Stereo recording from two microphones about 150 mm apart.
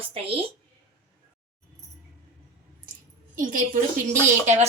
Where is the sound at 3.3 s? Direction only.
65° right (ahead or behind).